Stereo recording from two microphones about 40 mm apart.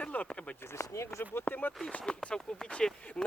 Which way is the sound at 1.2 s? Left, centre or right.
Left.